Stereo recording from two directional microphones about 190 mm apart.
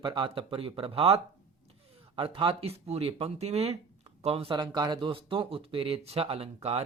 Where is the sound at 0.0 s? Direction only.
25° right (ahead or behind).